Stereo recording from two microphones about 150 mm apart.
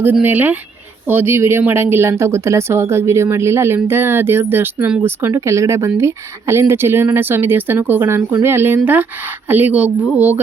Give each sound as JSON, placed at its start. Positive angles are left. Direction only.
{"t": 0.0, "sound": "speech", "side_deg": -10}